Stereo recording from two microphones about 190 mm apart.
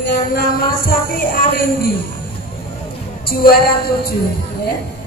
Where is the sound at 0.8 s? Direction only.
50° left (ahead or behind).